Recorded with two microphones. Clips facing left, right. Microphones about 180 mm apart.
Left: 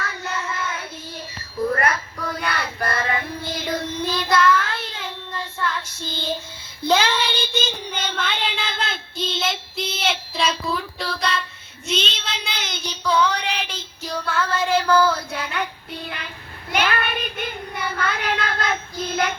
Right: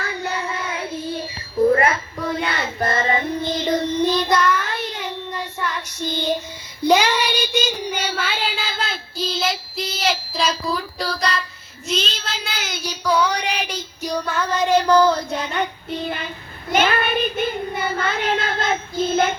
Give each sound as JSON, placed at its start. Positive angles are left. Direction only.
{"t": 0.4, "sound": "child singing", "side_deg": -30}
{"t": 17.7, "sound": "child singing", "side_deg": -30}